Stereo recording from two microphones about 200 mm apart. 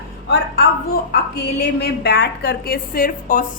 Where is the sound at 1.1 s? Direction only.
55° left (ahead or behind).